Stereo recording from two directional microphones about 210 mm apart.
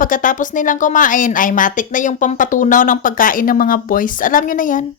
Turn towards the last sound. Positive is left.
turn(degrees=40)  # may be behind; listen again after turning